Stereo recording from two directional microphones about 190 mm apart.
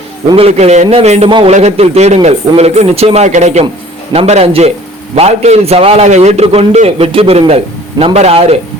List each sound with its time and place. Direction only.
0.3 s a man's voice: 30° right (ahead or behind)